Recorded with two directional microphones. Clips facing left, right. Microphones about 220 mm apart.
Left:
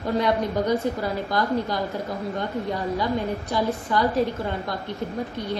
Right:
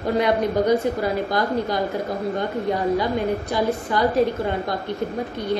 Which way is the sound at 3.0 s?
15° right (ahead or behind).